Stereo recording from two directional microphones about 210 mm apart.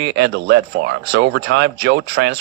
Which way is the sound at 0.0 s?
50° right (ahead or behind).